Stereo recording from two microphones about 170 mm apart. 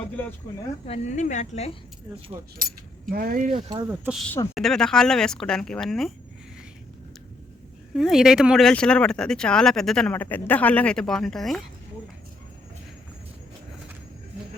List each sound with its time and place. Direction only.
0.9 s speech: 45° left (ahead or behind)
2.6 s speech: 55° right (ahead or behind)
3.8 s speech: 10° right (ahead or behind)
4.5 s speech: centre (ahead or behind)
7.9 s speech: centre (ahead or behind)